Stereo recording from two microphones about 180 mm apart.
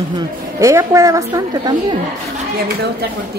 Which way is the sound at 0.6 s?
15° right (ahead or behind).